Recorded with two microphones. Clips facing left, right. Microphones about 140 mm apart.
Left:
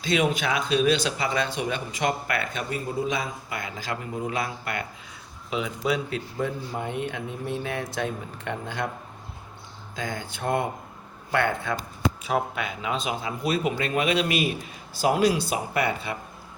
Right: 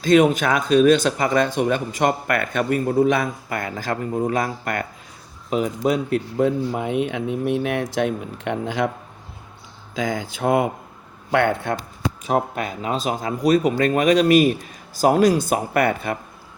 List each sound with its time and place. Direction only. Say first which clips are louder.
0.0 s speech: right 9 dB; 45° right (ahead or behind)
6.4 s speech: right 8 dB; 90° right
7.3 s speech: right 9 dB; 20° right (ahead or behind)
7.6 s speech: right 7 dB; 85° right
9.9 s speech: right 8 dB; 90° right
12.2 s speech: right 9 dB; 40° right (ahead or behind)